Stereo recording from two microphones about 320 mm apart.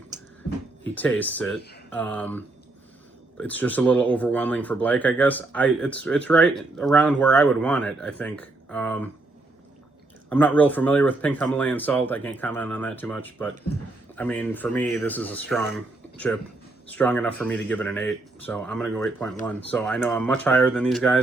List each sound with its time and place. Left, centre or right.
0.1 s a sound: right
0.9 s speech: centre
10.2 s speech: centre